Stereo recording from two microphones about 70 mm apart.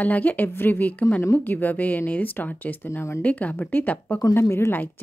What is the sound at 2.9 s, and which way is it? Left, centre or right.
Speech, left.